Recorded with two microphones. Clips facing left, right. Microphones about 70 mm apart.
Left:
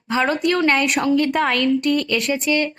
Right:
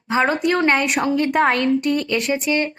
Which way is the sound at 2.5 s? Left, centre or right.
Right.